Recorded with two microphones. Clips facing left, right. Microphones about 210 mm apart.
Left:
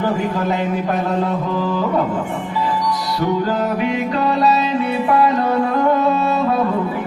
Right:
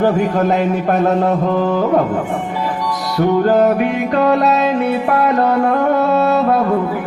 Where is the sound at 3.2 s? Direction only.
55° right (ahead or behind).